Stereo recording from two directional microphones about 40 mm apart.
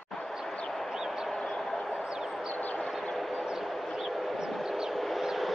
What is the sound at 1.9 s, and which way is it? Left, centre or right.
Bird, right.